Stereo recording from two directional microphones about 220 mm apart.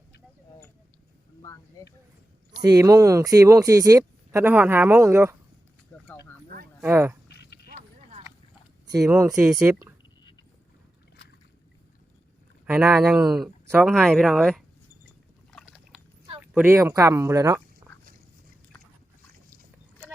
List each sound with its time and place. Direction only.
1.4 s speech: 15° left (ahead or behind)
2.5 s speech: 15° right (ahead or behind)
6.8 s speech: 10° right (ahead or behind)
7.3 s a sound: 50° left (ahead or behind)
8.9 s speech: 15° right (ahead or behind)
9.4 s speech: 5° right (ahead or behind)
12.6 s speech: 5° right (ahead or behind)
15.5 s a sound: 5° right (ahead or behind)
16.4 s speech: 10° right (ahead or behind)
17.8 s duck: 10° right (ahead or behind)